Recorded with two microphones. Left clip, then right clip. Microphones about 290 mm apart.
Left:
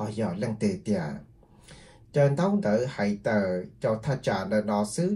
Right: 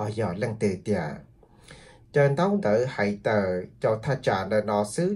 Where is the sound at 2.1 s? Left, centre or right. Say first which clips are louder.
Right 2 dB; right.